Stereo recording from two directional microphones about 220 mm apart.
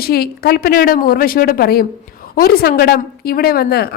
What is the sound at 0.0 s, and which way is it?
A woman's voice, 45° left (ahead or behind).